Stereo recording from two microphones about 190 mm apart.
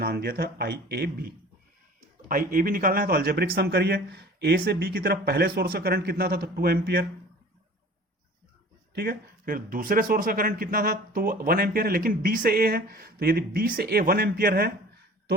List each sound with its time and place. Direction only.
0.0 s speech: 55° right (ahead or behind)
9.0 s speech: 50° right (ahead or behind)